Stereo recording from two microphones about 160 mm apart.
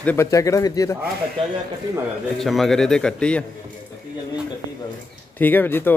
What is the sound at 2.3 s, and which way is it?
Speech, centre (ahead or behind).